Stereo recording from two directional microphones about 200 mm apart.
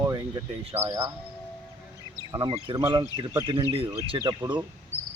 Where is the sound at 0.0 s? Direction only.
15° right (ahead or behind).